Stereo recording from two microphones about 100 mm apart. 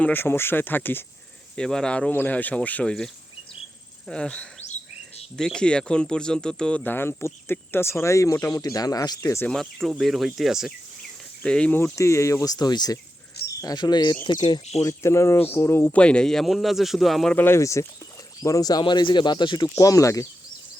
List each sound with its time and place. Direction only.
0.0 s speech: 20° left (ahead or behind)
1.5 s speech: 5° left (ahead or behind); by 9.4 s 35° left (ahead or behind)
9.5 s speech: 5° left (ahead or behind)
11.4 s speech: 10° left (ahead or behind)
11.8 s speech: 30° left (ahead or behind); by 14.6 s 45° left (ahead or behind)
14.8 s speech: 30° left (ahead or behind)
16.0 s speech: 10° left (ahead or behind)
17.3 s speech: 25° left (ahead or behind); by 19.6 s 50° left (ahead or behind)
19.6 s speech: 35° left (ahead or behind)